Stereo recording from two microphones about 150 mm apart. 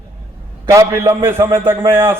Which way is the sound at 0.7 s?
20° right (ahead or behind).